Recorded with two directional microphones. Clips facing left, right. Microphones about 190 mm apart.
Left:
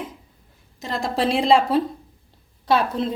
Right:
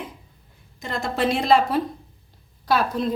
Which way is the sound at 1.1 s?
30° left (ahead or behind).